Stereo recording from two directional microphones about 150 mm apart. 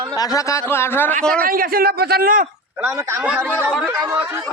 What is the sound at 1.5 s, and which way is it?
Speech, 75° right (ahead or behind).